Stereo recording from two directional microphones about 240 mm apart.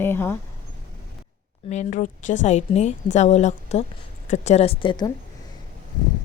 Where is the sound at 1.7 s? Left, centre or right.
Left.